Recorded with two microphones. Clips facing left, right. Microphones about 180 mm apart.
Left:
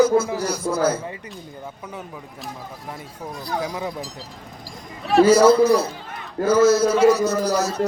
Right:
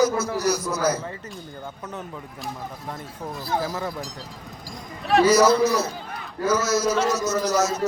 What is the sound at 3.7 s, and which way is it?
Speech, 15° left (ahead or behind).